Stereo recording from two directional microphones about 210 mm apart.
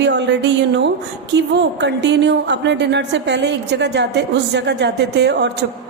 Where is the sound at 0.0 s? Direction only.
55° right (ahead or behind).